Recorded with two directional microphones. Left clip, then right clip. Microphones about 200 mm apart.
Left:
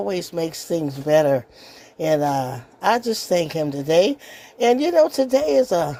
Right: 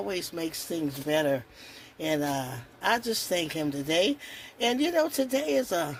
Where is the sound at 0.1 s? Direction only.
40° left (ahead or behind).